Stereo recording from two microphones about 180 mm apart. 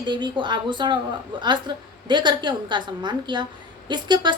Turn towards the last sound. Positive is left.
turn(degrees=-25)  # may be behind; listen again after turning